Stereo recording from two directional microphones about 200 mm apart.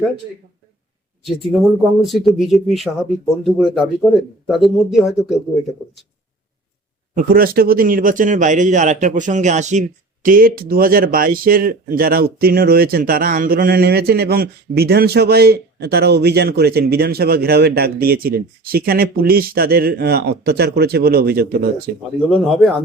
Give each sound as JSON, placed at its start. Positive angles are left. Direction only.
{"t": 1.8, "sound": "speech", "side_deg": 0}
{"t": 7.2, "sound": "speech", "side_deg": -45}
{"t": 22.3, "sound": "speech", "side_deg": 0}